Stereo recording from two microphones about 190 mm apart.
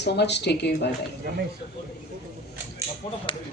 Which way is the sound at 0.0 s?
65° left (ahead or behind).